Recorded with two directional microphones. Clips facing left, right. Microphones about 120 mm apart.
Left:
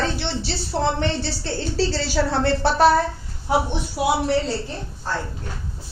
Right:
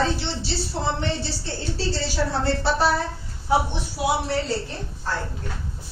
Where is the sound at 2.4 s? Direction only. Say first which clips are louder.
Left 6 dB; 60° left (ahead or behind).